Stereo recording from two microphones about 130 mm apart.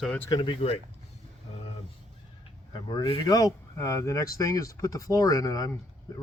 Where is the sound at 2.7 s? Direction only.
35° left (ahead or behind).